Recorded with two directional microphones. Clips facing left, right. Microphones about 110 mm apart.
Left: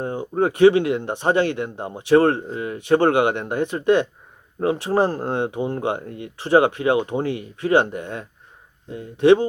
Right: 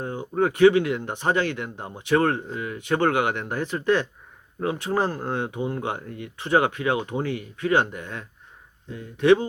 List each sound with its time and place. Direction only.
0.0 s speech: 30° left (ahead or behind)